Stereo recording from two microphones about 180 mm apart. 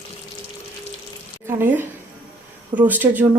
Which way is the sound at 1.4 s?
10° right (ahead or behind).